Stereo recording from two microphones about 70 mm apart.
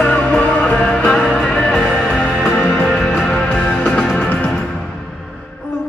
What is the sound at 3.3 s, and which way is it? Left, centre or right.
Music, centre.